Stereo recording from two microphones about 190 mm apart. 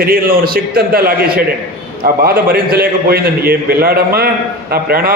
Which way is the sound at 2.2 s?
55° right (ahead or behind).